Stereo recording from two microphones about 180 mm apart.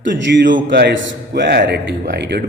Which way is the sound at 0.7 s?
70° right (ahead or behind).